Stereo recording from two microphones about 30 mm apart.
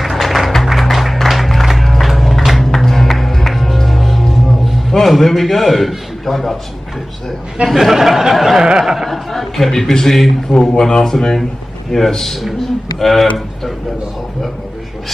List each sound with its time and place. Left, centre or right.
0.0 s music: centre
5.0 s a man's voice: centre
7.6 s speech: centre
8.6 s snicker: centre
8.9 s a man's voice: centre
12.5 s a sound: centre